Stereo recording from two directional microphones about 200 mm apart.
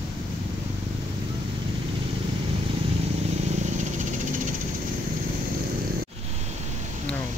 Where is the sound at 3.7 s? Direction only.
40° right (ahead or behind).